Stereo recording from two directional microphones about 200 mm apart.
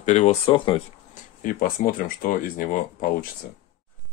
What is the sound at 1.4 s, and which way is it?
Speech, 45° left (ahead or behind).